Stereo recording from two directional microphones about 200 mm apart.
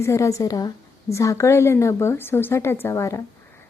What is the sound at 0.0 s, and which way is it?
A woman's voice, 15° left (ahead or behind).